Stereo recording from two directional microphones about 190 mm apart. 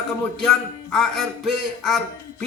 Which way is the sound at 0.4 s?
5° left (ahead or behind).